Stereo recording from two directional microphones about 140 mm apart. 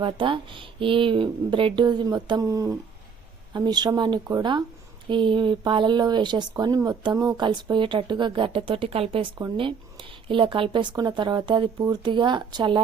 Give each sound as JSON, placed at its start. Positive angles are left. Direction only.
{"t": 0.0, "sound": "a woman's voice", "side_deg": -35}